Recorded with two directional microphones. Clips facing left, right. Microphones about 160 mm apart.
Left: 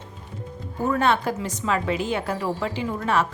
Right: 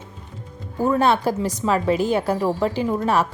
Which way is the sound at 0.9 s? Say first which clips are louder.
Right 3 dB; 35° right (ahead or behind).